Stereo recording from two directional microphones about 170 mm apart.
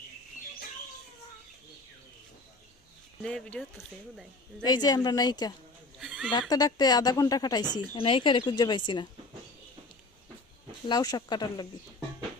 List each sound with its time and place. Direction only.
3.2 s speech: 5° left (ahead or behind)
4.6 s speech: 25° left (ahead or behind)
6.0 s a sound: centre (ahead or behind)
6.5 s speech: 20° left (ahead or behind)
10.8 s speech: 25° left (ahead or behind)